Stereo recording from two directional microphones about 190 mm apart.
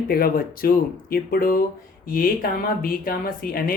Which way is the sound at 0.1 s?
50° left (ahead or behind).